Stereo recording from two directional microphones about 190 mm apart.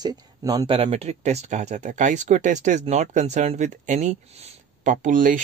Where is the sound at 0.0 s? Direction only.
20° right (ahead or behind).